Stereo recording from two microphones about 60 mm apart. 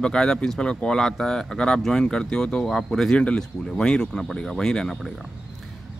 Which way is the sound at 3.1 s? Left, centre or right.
Centre.